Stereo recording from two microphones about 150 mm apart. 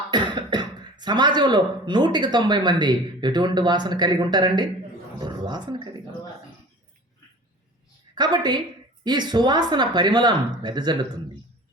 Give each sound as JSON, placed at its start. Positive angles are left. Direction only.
{"t": 0.1, "sound": "speech", "side_deg": -30}
{"t": 8.1, "sound": "speech", "side_deg": -30}